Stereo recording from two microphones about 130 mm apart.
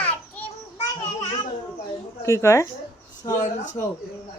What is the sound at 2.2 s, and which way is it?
Speech, 20° left (ahead or behind).